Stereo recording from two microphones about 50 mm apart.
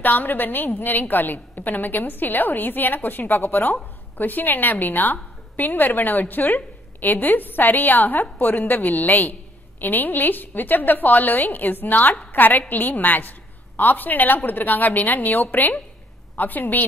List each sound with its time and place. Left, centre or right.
0.0 s a woman's voice: left